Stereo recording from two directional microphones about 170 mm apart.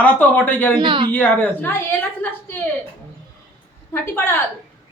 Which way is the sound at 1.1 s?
10° left (ahead or behind).